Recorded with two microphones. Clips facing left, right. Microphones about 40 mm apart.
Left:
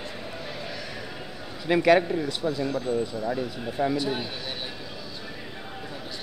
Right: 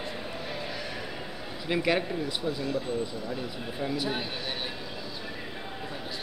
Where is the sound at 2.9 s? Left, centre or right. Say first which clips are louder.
Left 5 dB; centre.